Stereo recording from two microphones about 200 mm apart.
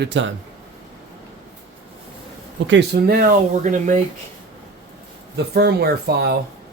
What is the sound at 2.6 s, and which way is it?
Speech, 60° right (ahead or behind).